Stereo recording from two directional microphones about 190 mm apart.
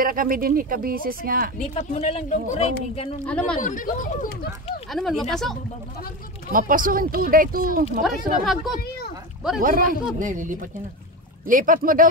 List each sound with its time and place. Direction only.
0.0 s speech: 45° right (ahead or behind)
1.6 s speech: 40° left (ahead or behind)
3.3 s speech: 5° left (ahead or behind)
3.5 s speech: 45° left (ahead or behind)
4.9 s speech: centre (ahead or behind)
6.5 s speech: 45° right (ahead or behind)
8.0 s speech: centre (ahead or behind)
9.6 s speech: 45° right (ahead or behind)